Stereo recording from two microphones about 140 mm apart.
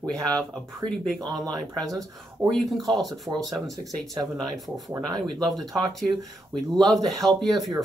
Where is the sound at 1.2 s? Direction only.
25° right (ahead or behind).